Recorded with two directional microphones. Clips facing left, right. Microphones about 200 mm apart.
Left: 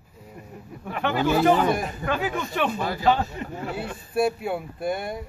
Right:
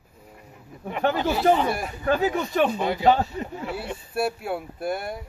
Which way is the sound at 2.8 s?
20° right (ahead or behind).